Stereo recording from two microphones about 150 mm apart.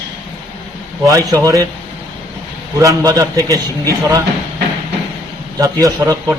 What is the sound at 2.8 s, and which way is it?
A man's voice, 20° right (ahead or behind).